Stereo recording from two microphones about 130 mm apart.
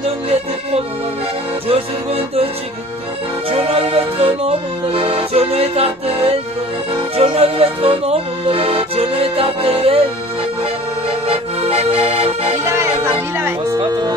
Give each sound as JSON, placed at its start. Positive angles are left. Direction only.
{"t": 0.3, "sound": "music", "side_deg": -50}
{"t": 11.2, "sound": "accordion", "side_deg": -50}
{"t": 12.6, "sound": "music", "side_deg": -20}
{"t": 13.7, "sound": "music", "side_deg": -35}